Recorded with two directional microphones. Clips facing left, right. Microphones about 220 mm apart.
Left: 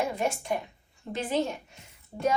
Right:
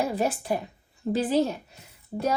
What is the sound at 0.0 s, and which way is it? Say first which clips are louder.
A woman's voice: right 3 dB; 35° right (ahead or behind).